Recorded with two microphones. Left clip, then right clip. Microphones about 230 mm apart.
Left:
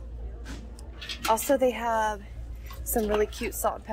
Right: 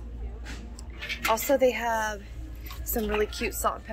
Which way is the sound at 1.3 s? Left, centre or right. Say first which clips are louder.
Even; centre.